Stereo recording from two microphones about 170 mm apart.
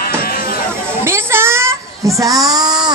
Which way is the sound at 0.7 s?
15° right (ahead or behind).